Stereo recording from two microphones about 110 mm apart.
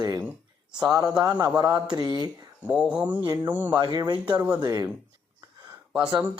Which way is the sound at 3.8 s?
40° right (ahead or behind).